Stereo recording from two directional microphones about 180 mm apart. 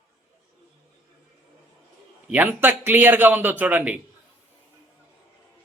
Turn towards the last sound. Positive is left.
turn(degrees=-10)  # may be behind; listen again after turning